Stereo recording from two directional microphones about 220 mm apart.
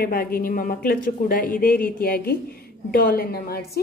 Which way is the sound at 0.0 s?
40° left (ahead or behind).